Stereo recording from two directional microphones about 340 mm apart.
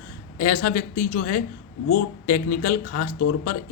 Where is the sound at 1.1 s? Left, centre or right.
Left.